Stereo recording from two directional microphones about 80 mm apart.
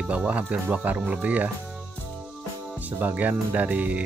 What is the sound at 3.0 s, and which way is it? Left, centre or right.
Speech, right.